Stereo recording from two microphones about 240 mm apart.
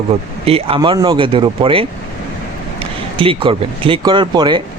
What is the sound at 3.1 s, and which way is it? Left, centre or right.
Speech, right.